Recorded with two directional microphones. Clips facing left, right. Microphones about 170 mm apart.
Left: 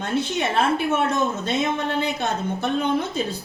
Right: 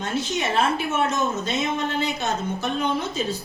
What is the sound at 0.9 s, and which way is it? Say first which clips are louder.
A woman's voice: left 2 dB; 55° left (ahead or behind).